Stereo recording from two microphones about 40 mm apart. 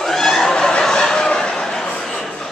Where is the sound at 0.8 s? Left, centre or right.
Centre.